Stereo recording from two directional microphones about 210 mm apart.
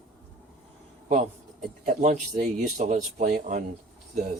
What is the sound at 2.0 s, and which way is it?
Speech, 35° right (ahead or behind).